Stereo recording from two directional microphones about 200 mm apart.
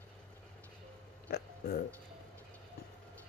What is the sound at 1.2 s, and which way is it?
Burping, 50° left (ahead or behind).